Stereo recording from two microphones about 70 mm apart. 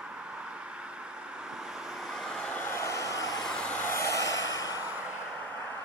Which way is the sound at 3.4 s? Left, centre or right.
Centre.